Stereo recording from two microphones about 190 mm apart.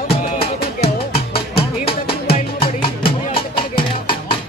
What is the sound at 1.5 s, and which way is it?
Music, 30° left (ahead or behind).